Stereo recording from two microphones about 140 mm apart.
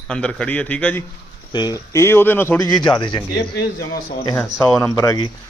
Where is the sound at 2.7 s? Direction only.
30° left (ahead or behind).